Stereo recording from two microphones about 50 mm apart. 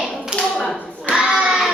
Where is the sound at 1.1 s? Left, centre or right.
Centre.